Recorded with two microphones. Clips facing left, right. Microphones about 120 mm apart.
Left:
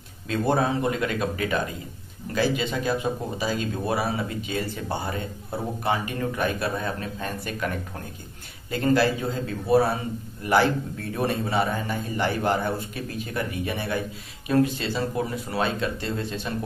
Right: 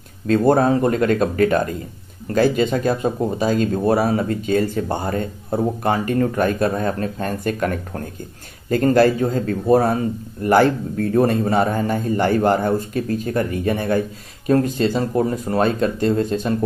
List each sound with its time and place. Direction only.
0.3 s speech: 45° right (ahead or behind)